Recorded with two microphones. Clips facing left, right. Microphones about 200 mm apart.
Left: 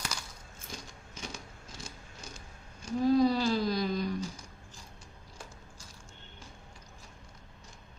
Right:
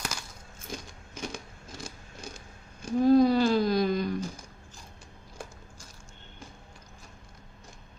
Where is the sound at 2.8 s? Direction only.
55° right (ahead or behind).